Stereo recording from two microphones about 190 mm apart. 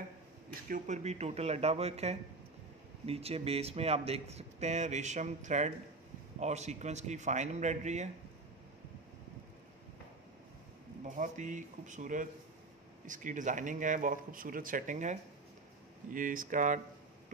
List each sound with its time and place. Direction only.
0.7 s speech: 45° right (ahead or behind)
11.1 s speech: 40° right (ahead or behind)